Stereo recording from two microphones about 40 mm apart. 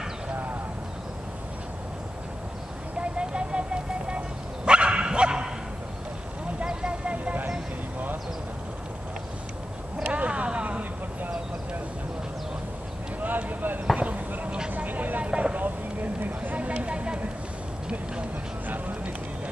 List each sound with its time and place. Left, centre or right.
0.3 s horse: right
3.0 s vehicle: right
4.6 s dog: right
6.6 s vehicle: right
10.0 s vehicle: right
13.2 s clip-clop: right
14.9 s vehicle: right
15.6 s a sound: right
16.5 s a sound: right
18.7 s music: right